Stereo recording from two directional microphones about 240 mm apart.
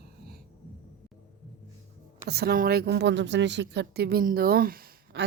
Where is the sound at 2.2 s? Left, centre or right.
Right.